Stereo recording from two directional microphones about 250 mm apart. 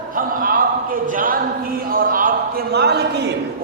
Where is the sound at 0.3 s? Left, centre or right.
Right.